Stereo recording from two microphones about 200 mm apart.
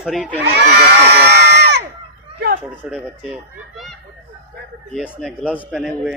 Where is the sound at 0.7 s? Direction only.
55° right (ahead or behind).